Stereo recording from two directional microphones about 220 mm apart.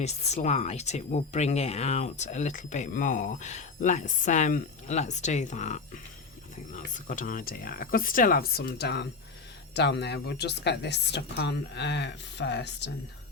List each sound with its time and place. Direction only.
0.0 s a woman's voice: 30° left (ahead or behind); by 12.9 s 50° left (ahead or behind)